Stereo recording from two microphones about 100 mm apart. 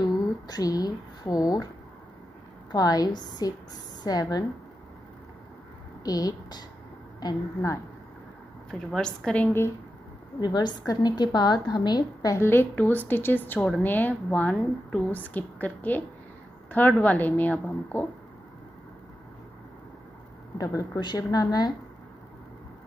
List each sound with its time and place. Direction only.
0.0 s speech: 40° left (ahead or behind)
2.7 s a woman's voice: 40° left (ahead or behind)
6.0 s a woman's voice: 40° left (ahead or behind)
8.7 s a woman's voice: 10° left (ahead or behind)
10.4 s a woman's voice: 45° left (ahead or behind)
12.4 s a woman's voice: 25° left (ahead or behind)
20.5 s a woman's voice: 35° left (ahead or behind)